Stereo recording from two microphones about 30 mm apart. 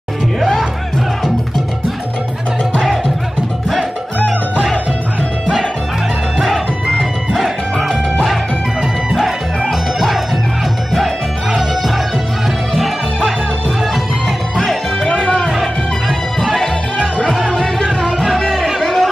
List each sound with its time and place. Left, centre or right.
9.1 s music: centre
15.0 s music: left
16.3 s music: centre
18.5 s music: centre